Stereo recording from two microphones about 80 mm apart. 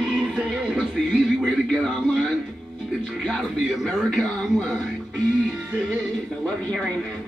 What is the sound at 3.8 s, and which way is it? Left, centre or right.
Speech, centre.